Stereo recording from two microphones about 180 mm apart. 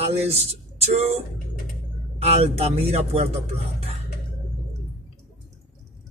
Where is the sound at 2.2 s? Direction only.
35° right (ahead or behind).